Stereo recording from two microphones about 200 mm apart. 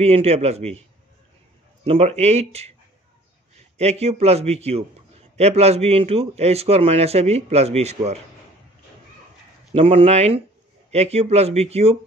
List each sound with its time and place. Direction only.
0.0 s a man's voice: 30° right (ahead or behind)
1.9 s a man's voice: 30° right (ahead or behind)
3.7 s a man's voice: 35° right (ahead or behind)
9.7 s a man's voice: 30° right (ahead or behind)